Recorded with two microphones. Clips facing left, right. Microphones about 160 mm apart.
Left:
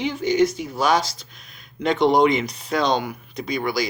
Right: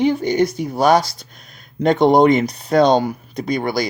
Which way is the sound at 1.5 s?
45° right (ahead or behind).